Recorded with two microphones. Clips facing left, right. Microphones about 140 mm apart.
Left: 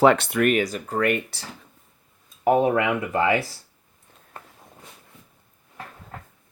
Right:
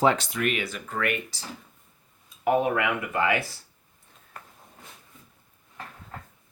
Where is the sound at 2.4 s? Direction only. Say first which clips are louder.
Left 4 dB; 30° left (ahead or behind).